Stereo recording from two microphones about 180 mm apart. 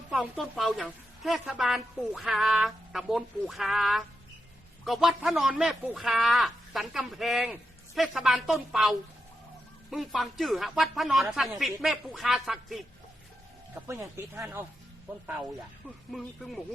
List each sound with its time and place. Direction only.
0.1 s speech: centre (ahead or behind)
13.8 s speech: 15° right (ahead or behind)
16.1 s speech: centre (ahead or behind)